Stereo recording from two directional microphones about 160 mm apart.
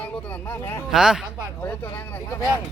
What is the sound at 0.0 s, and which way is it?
Speech, 10° left (ahead or behind).